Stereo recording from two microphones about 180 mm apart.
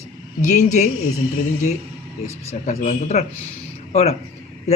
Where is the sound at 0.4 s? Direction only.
40° left (ahead or behind).